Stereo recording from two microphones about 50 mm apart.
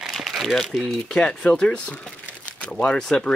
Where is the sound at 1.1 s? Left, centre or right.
Centre.